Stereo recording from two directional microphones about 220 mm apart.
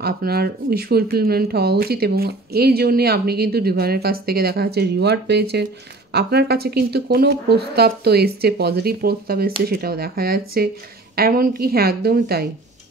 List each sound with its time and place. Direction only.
0.0 s speech: 45° right (ahead or behind)